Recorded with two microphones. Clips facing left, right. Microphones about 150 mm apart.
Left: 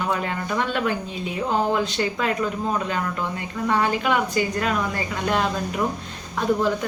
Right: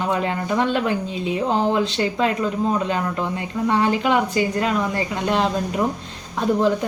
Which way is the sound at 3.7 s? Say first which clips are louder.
Right 2 dB; 30° right (ahead or behind).